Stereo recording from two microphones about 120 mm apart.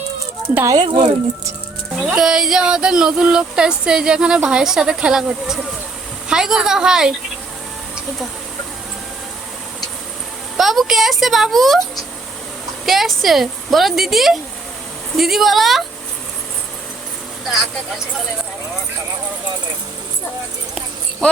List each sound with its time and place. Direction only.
0.5 s a child's voice: 25° right (ahead or behind)
0.8 s speech: 45° right (ahead or behind)
2.0 s speech: 5° right (ahead or behind)
10.6 s speech: centre (ahead or behind)
12.8 s speech: centre (ahead or behind)